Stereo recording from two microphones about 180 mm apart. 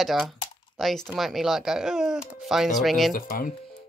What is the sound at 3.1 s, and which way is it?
Speech, 50° left (ahead or behind).